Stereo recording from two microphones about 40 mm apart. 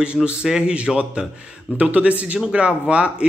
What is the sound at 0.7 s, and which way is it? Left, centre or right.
Speech, right.